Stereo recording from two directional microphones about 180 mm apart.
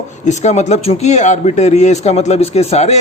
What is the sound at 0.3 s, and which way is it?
A man's voice, 40° left (ahead or behind).